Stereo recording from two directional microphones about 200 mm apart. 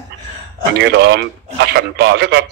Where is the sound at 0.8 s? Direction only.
60° right (ahead or behind).